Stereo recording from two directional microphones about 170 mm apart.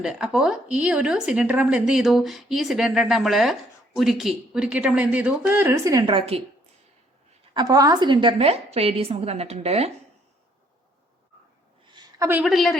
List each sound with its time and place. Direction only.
0.0 s speech: 5° right (ahead or behind); by 6.4 s 35° right (ahead or behind)
7.5 s a woman's voice: 25° right (ahead or behind); by 9.9 s 40° right (ahead or behind)
11.9 s a sound: 25° right (ahead or behind)
12.3 s speech: 5° right (ahead or behind)